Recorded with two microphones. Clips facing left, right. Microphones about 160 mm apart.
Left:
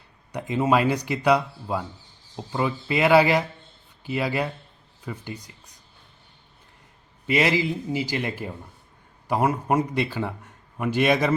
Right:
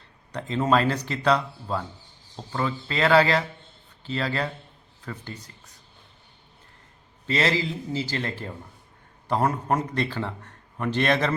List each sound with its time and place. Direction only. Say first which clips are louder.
0.3 s a man's voice: left 1 dB; 10° left (ahead or behind)
7.3 s a man's voice: left 3 dB; 15° left (ahead or behind)